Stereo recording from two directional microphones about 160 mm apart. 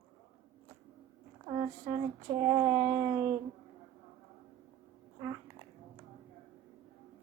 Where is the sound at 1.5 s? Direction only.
20° right (ahead or behind).